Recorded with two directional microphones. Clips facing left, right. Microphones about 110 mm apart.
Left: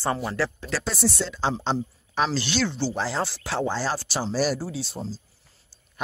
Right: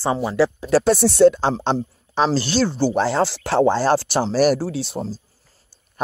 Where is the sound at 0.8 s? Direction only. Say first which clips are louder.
Right 15 dB; 70° right (ahead or behind).